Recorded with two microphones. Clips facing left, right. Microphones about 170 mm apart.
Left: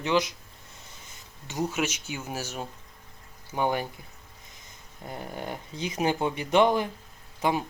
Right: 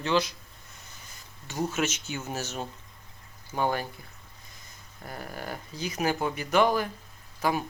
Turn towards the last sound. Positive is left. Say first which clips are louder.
# left 1 dB
turn(degrees=25)  # may be behind; listen again after turning